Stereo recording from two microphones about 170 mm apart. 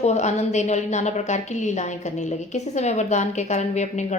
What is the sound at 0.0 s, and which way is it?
A woman's voice, 40° left (ahead or behind).